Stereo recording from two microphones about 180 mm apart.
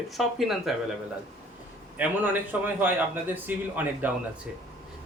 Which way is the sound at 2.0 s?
10° right (ahead or behind).